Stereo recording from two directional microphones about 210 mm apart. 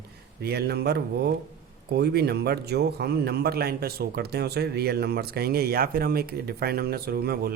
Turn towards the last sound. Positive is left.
turn(degrees=-45)  # may be behind; listen again after turning